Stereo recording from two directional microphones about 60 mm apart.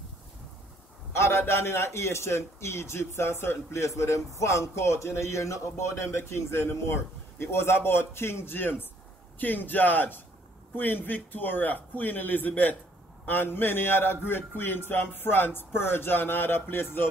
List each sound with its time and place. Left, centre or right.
1.1 s a man's voice: left